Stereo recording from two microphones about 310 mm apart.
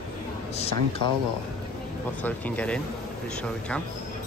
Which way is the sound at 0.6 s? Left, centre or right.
Centre.